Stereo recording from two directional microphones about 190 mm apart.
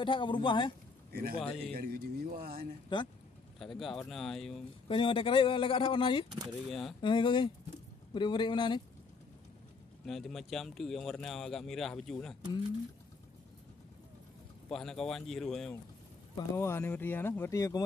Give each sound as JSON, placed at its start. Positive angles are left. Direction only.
{"t": 0.0, "sound": "speech", "side_deg": 25}
{"t": 1.1, "sound": "a man's voice", "side_deg": -50}
{"t": 3.5, "sound": "speech", "side_deg": 0}
{"t": 4.8, "sound": "speech", "side_deg": 25}
{"t": 6.3, "sound": "speech", "side_deg": 0}
{"t": 7.0, "sound": "speech", "side_deg": 25}
{"t": 10.0, "sound": "speech", "side_deg": 0}
{"t": 14.7, "sound": "speech", "side_deg": 0}
{"t": 16.3, "sound": "speech", "side_deg": 15}